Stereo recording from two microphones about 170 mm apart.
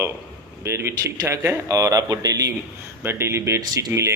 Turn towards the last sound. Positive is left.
turn(degrees=-20)  # may be behind; listen again after turning